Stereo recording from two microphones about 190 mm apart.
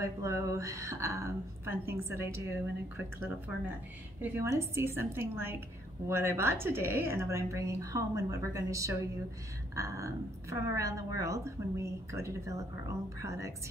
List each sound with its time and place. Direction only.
0.0 s a woman's voice: 15° right (ahead or behind)